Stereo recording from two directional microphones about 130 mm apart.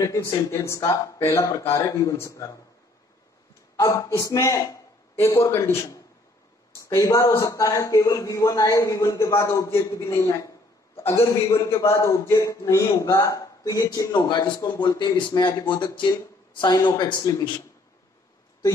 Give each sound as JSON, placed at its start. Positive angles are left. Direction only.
{"t": 0.0, "sound": "a man's voice", "side_deg": 25}
{"t": 3.7, "sound": "a man's voice", "side_deg": 25}